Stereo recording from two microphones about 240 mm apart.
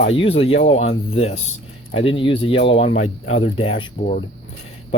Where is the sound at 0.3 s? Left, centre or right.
Left.